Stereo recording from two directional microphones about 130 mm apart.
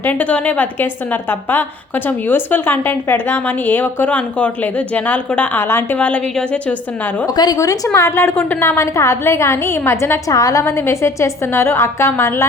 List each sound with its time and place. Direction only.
0.0 s a woman's voice: 10° left (ahead or behind)
7.3 s a woman's voice: 30° left (ahead or behind)